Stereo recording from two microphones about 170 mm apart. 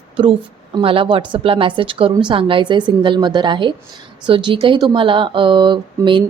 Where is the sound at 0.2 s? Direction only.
30° right (ahead or behind).